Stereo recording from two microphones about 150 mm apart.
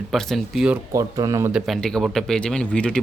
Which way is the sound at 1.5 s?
Centre (ahead or behind).